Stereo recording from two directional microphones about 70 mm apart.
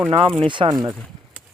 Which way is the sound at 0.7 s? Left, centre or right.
Right.